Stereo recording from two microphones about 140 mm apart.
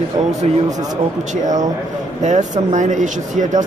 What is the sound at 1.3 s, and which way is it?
Speech, 60° right (ahead or behind).